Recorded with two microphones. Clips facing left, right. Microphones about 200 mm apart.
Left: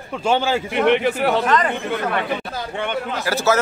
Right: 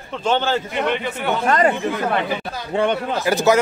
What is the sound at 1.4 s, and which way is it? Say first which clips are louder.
Speech: right 2 dB; 45° right (ahead or behind).